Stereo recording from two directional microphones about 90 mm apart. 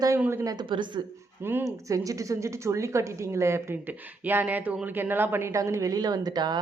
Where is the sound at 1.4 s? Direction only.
25° right (ahead or behind).